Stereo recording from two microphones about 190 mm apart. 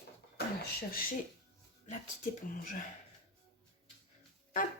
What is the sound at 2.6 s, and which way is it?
Speech, 45° left (ahead or behind).